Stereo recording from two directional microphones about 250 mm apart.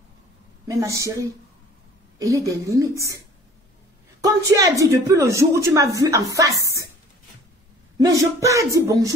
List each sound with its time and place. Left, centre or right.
0.7 s a woman's voice: centre
4.2 s a woman's voice: centre
8.0 s a woman's voice: centre